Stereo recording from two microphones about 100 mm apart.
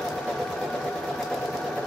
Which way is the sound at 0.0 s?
Centre (ahead or behind).